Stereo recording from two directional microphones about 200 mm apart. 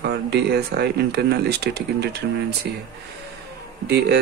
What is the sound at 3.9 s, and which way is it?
Speech, 55° right (ahead or behind).